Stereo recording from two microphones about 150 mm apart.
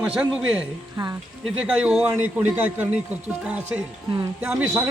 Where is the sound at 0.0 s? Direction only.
10° right (ahead or behind).